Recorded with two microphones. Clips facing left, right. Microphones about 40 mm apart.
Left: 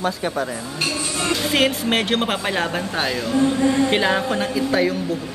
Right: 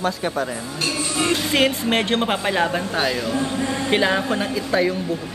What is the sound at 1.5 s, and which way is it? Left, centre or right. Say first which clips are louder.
Speech: left 2 dB; centre.